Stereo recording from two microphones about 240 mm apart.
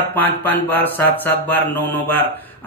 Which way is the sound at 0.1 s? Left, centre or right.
Centre.